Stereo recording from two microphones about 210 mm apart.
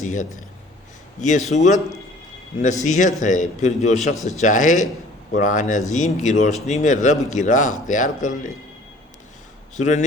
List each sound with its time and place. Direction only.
0.0 s a man's voice: 35° left (ahead or behind)
2.8 s speech: 35° left (ahead or behind)
9.7 s speech: 35° left (ahead or behind)